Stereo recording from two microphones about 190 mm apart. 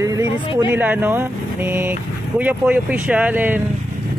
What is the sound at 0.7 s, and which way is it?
Speech, 10° right (ahead or behind).